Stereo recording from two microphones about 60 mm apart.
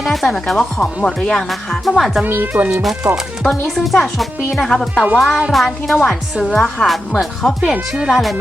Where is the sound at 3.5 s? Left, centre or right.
Centre.